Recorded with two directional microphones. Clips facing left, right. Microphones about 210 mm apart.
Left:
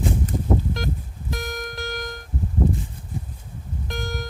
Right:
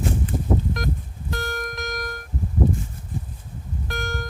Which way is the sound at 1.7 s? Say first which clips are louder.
Even; 30° left (ahead or behind).